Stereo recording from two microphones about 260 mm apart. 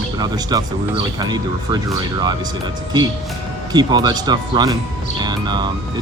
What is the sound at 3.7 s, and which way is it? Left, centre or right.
Speech, centre.